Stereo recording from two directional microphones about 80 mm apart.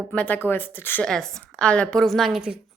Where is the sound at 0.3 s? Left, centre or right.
Left.